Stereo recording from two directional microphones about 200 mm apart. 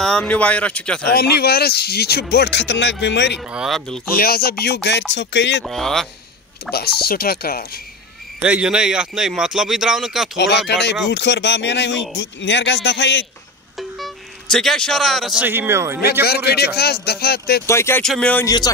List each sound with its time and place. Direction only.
0.0 s speech: 5° left (ahead or behind)
1.1 s speech: 50° left (ahead or behind)
3.3 s a man's voice: 5° right (ahead or behind)
4.2 s speech: 50° left (ahead or behind)
5.6 s a man's voice: centre (ahead or behind)
6.7 s speech: 50° left (ahead or behind)
8.4 s a man's voice: 5° right (ahead or behind)
10.3 s speech: 60° left (ahead or behind)
13.7 s speech: centre (ahead or behind)
16.0 s speech: 50° left (ahead or behind)
17.6 s speech: 10° left (ahead or behind)